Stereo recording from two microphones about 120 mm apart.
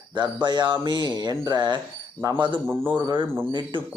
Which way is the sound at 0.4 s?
40° right (ahead or behind).